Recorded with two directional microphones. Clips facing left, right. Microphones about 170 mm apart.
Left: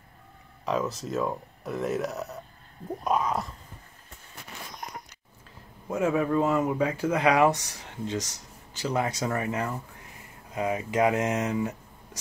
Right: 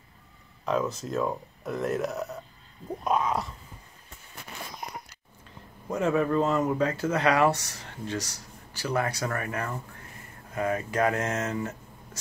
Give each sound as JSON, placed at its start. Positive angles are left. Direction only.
{"t": 0.7, "sound": "speech", "side_deg": 0}
{"t": 5.9, "sound": "speech", "side_deg": 10}